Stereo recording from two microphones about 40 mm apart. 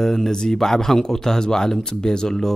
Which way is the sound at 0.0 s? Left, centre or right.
Centre.